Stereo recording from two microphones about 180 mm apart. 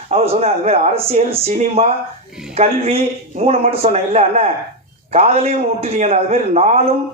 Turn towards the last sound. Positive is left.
turn(degrees=-35)  # may be behind; listen again after turning